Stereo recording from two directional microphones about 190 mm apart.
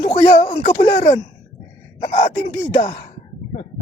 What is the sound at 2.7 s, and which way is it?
Speech, 45° left (ahead or behind).